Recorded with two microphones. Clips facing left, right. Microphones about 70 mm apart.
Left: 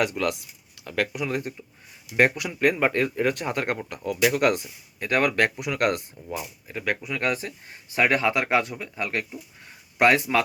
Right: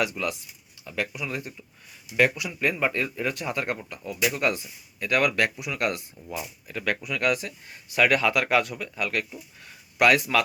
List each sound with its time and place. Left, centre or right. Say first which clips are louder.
0.0 s speech: left 3 dB; left
4.9 s speech: left 1 dB; left
5.5 s speech: left 4 dB; left
6.7 s speech: even; centre